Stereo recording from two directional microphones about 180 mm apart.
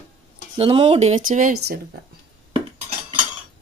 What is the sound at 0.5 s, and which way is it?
Speech, 30° right (ahead or behind).